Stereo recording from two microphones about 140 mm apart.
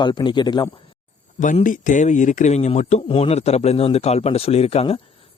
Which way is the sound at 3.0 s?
45° left (ahead or behind).